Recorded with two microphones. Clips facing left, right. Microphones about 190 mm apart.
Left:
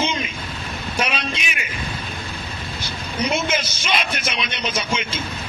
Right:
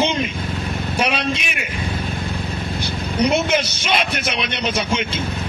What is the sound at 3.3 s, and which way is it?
Speech, 65° right (ahead or behind).